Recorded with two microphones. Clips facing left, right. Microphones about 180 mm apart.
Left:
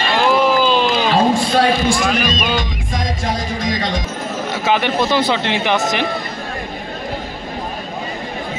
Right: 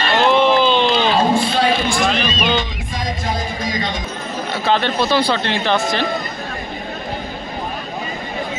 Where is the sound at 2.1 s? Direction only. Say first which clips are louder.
Left 1 dB; 10° left (ahead or behind).